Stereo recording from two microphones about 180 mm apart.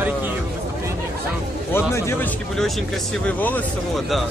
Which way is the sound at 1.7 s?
10° left (ahead or behind).